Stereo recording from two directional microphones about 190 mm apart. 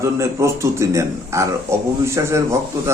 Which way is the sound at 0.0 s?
15° right (ahead or behind).